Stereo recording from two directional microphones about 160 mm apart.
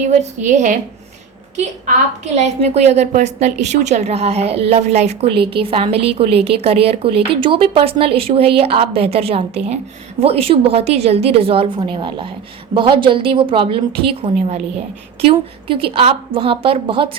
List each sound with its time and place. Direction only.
0.1 s a woman's voice: 45° right (ahead or behind)
2.2 s a woman's voice: 45° right (ahead or behind)